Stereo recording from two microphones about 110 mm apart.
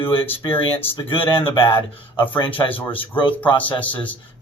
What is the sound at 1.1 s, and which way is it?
Speech, 50° left (ahead or behind).